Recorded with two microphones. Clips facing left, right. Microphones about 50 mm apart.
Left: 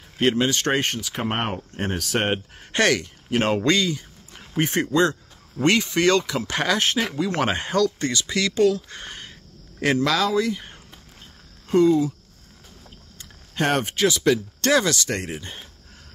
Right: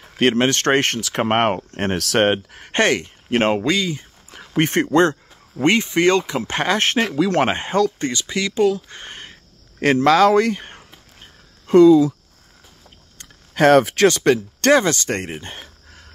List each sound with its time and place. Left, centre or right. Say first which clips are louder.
0.0 s speech: right 4 dB; right
2.7 s speech: right 2 dB; right
3.6 s speech: even; centre
4.4 s speech: right 5 dB; right
5.6 s speech: right 3 dB; right
7.4 s speech: right 3 dB; right
10.2 s speech: right 7 dB; right
11.1 s a sound: right 1 dB; right
13.2 s a sound: right 9 dB; right
14.0 s speech: right 5 dB; right
14.8 s speech: right 3 dB; right